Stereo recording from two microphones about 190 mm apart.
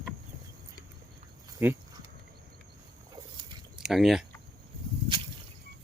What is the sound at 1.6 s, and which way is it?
Speech, 10° right (ahead or behind).